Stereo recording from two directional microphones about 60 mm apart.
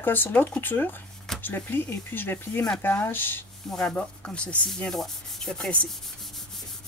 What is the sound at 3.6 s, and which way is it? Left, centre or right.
Rub, centre.